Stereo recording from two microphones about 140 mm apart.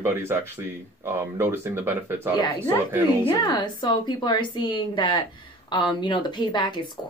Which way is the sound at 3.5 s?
30° left (ahead or behind).